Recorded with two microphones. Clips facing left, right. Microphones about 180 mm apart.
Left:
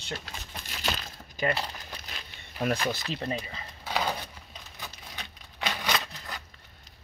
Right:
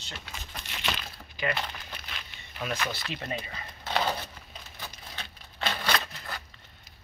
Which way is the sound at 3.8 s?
10° left (ahead or behind).